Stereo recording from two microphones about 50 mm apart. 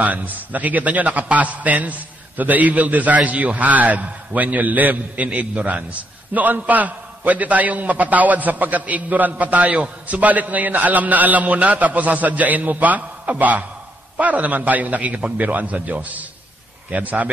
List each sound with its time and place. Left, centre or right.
0.0 s a man's voice: right